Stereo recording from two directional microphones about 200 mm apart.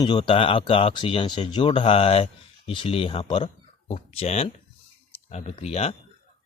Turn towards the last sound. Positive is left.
turn(degrees=30)  # may be behind; listen again after turning